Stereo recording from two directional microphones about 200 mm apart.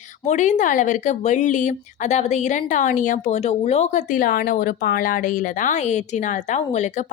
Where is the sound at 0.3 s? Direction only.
35° left (ahead or behind).